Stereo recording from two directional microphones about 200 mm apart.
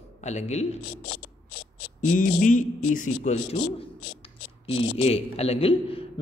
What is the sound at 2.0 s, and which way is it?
A man's voice, 40° left (ahead or behind).